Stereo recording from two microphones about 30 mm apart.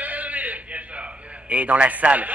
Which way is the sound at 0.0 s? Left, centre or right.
Right.